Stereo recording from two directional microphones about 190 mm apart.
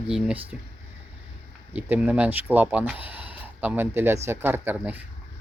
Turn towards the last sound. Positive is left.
turn(degrees=-10)  # may be behind; listen again after turning